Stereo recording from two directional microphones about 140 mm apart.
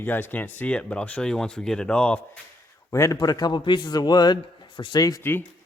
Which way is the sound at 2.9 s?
20° left (ahead or behind).